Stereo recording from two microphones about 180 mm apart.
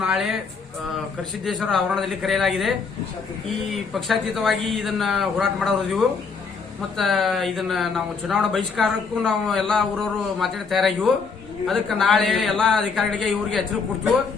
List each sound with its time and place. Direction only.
0.0 s speech: centre (ahead or behind)
1.5 s speech: centre (ahead or behind)